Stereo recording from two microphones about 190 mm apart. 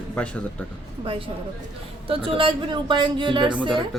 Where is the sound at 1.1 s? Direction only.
25° right (ahead or behind).